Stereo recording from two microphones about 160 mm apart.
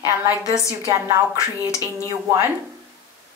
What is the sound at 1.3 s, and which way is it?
Speech, 20° left (ahead or behind).